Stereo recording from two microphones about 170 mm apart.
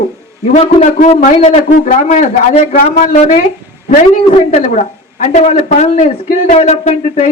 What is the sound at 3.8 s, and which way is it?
A man's voice, 45° left (ahead or behind).